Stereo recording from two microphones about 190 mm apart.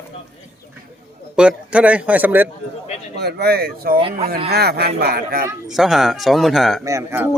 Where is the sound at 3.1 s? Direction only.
60° right (ahead or behind).